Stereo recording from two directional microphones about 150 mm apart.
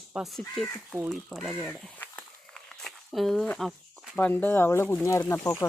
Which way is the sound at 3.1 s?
Centre (ahead or behind).